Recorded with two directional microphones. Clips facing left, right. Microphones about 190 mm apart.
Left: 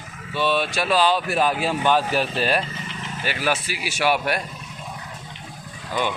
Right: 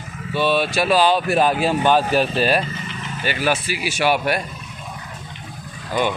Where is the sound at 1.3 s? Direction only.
30° right (ahead or behind).